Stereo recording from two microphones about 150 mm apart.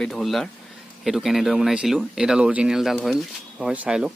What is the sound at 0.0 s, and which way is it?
Speech, centre (ahead or behind).